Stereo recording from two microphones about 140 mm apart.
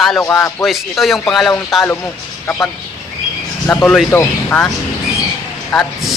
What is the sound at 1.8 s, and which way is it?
Speech, 15° left (ahead or behind).